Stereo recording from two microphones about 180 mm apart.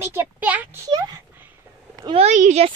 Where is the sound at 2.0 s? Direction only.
35° right (ahead or behind).